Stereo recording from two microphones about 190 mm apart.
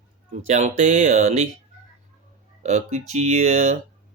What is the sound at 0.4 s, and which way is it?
Speech, 40° right (ahead or behind).